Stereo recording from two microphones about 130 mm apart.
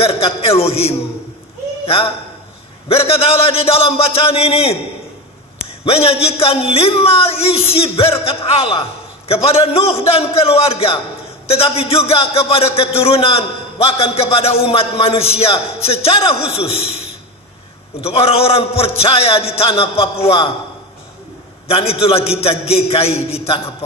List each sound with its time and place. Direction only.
0.0 s a man's voice: 50° left (ahead or behind)
1.9 s a man's voice: 50° left (ahead or behind)
5.9 s a man's voice: 50° left (ahead or behind)
18.0 s a man's voice: 50° left (ahead or behind)
21.6 s a man's voice: 50° left (ahead or behind)